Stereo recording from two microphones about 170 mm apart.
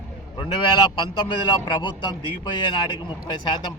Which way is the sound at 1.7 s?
25° left (ahead or behind).